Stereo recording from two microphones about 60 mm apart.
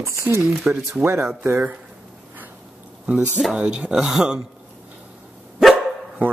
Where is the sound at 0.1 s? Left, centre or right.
Right.